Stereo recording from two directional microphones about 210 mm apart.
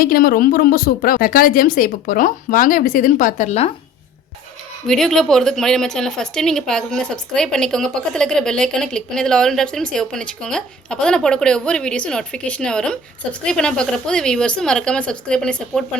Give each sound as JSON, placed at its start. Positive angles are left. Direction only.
{"t": 0.0, "sound": "a woman's voice", "side_deg": 45}
{"t": 4.9, "sound": "a woman's voice", "side_deg": 0}